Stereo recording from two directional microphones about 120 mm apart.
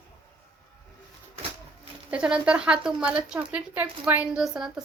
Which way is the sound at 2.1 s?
10° right (ahead or behind).